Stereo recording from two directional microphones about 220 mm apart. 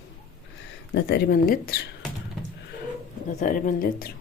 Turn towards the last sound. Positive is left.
turn(degrees=40)  # may be behind; listen again after turning